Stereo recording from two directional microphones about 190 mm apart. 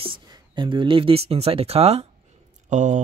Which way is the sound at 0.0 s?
25° right (ahead or behind).